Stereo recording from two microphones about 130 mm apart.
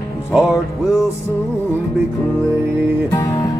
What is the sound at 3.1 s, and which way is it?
Music, 20° left (ahead or behind).